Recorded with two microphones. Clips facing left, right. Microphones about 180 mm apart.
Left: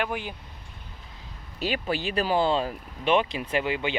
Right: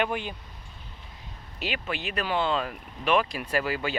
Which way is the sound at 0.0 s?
5° left (ahead or behind).